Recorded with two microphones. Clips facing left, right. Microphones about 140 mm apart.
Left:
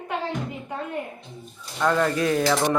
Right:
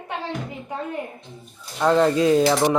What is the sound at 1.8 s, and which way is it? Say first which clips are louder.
Speech: right 4 dB; 25° right (ahead or behind).